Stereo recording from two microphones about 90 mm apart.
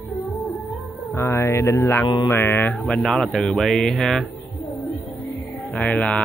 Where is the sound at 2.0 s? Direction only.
45° left (ahead or behind).